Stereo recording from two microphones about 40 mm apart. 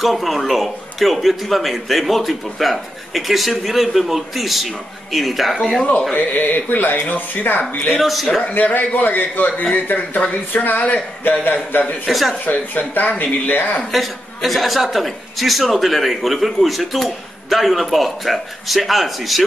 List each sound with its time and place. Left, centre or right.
0.0 s a man's voice: centre
6.1 s speech: left
8.0 s a man's voice: centre
8.7 s speech: left
12.1 s a man's voice: centre
12.4 s speech: left
13.9 s a man's voice: centre